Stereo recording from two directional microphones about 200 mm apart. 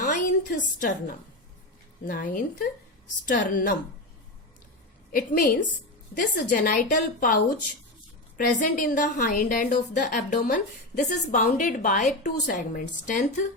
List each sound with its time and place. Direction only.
0.0 s a sound: 40° left (ahead or behind)
2.0 s a woman's voice: 45° left (ahead or behind)
5.1 s a woman's voice: 45° left (ahead or behind)
8.5 s a woman's voice: 40° left (ahead or behind)